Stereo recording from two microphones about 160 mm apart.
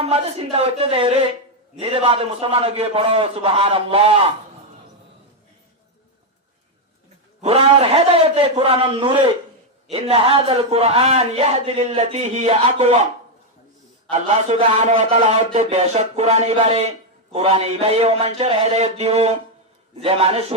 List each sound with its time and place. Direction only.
0.0 s a man's voice: 40° right (ahead or behind)
7.4 s a man's voice: 40° right (ahead or behind)
14.1 s a man's voice: 45° right (ahead or behind)